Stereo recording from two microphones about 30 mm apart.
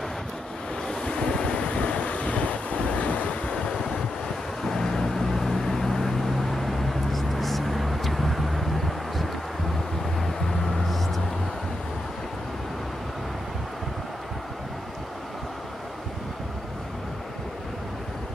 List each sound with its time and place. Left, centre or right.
1.0 s waves: left
3.4 s vehicle: left; by 11.1 s centre